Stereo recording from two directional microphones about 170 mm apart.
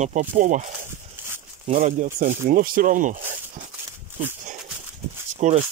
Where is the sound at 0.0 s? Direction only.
45° right (ahead or behind).